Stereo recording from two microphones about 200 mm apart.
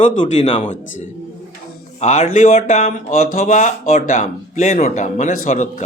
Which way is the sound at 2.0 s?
35° left (ahead or behind).